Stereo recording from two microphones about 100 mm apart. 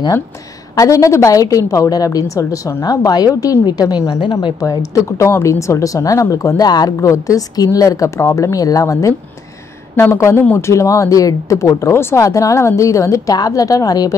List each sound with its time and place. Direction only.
0.7 s speech: 35° left (ahead or behind)
4.3 s speech: 50° left (ahead or behind)
4.6 s a woman's voice: 35° left (ahead or behind)